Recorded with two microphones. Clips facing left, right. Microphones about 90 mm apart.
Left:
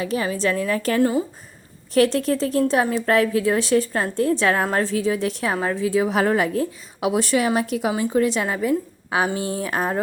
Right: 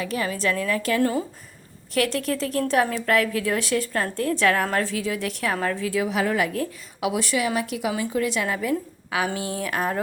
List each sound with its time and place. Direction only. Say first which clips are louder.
0.0 s a woman's voice: left 3 dB; 25° left (ahead or behind)
6.1 s a woman's voice: left 4 dB; 40° left (ahead or behind)